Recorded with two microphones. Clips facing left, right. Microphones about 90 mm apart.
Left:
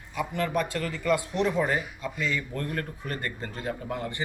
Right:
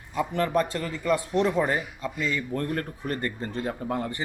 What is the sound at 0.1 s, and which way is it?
Speech, 35° right (ahead or behind).